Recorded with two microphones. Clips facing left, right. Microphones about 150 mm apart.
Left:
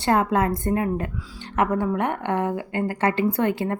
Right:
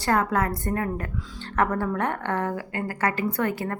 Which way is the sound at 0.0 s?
25° left (ahead or behind).